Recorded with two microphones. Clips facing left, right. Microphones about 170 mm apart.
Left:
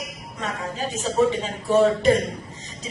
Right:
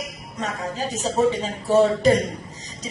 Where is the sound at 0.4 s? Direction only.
40° right (ahead or behind).